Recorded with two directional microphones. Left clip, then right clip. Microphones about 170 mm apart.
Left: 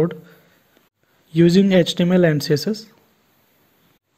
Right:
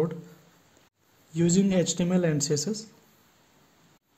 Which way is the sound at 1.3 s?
30° left (ahead or behind).